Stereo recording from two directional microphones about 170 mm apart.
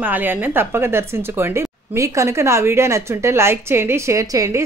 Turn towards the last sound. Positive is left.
turn(degrees=-20)  # may be behind; listen again after turning